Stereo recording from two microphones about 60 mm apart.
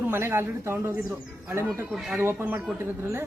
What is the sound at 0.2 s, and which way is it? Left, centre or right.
Speech, right.